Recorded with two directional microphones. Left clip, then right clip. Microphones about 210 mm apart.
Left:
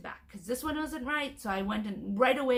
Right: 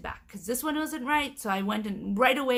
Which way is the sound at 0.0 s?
50° right (ahead or behind).